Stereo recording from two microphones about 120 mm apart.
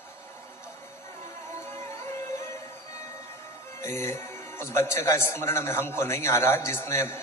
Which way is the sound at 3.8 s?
25° left (ahead or behind).